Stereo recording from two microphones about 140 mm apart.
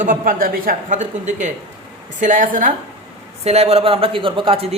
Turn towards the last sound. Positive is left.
turn(degrees=-45)  # may be behind; listen again after turning